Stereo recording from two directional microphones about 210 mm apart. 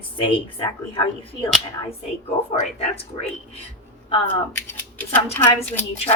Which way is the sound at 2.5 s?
35° left (ahead or behind).